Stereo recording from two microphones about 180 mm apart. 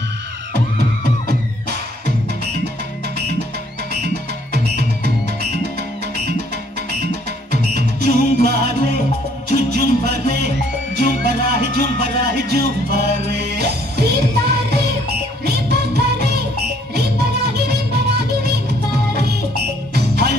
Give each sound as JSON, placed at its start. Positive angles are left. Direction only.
{"t": 1.2, "sound": "music", "side_deg": -65}
{"t": 4.7, "sound": "music", "side_deg": -65}
{"t": 7.7, "sound": "music", "side_deg": -60}